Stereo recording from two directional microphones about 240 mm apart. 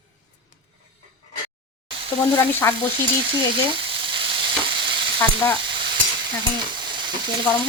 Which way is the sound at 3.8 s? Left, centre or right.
Right.